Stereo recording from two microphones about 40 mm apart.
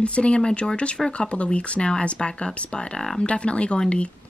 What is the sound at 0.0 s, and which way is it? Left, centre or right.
Speech, left.